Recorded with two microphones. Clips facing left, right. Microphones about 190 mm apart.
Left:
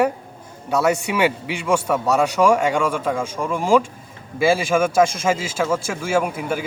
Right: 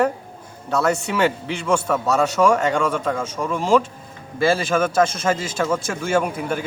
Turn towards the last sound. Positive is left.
turn(degrees=5)  # may be behind; listen again after turning